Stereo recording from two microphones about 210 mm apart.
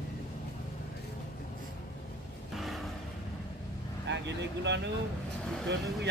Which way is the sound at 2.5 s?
Centre (ahead or behind).